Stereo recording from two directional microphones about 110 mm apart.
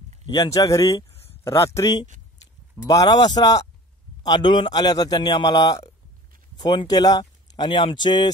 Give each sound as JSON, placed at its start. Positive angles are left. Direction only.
{"t": 0.5, "sound": "speech", "side_deg": 30}
{"t": 2.9, "sound": "a man's voice", "side_deg": 35}